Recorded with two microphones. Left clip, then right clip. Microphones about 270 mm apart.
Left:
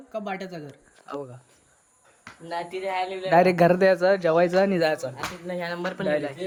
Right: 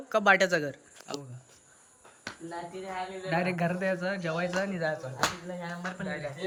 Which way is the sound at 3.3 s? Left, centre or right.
Centre.